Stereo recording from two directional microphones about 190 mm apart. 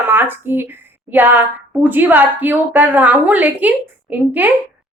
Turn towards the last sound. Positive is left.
turn(degrees=-10)  # may be behind; listen again after turning